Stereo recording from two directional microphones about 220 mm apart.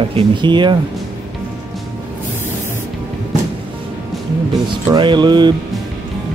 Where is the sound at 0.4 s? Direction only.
20° right (ahead or behind).